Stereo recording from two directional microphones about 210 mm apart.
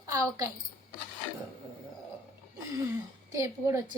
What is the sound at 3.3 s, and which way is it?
Speech, 15° right (ahead or behind).